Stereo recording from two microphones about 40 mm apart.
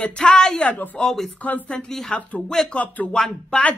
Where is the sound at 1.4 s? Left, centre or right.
Left.